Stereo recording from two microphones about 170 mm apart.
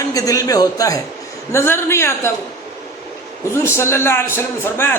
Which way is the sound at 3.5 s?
15° left (ahead or behind).